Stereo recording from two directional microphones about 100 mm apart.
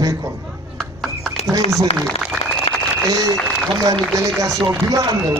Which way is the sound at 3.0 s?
35° right (ahead or behind).